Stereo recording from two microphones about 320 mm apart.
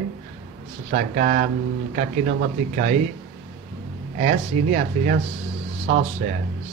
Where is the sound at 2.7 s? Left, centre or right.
Right.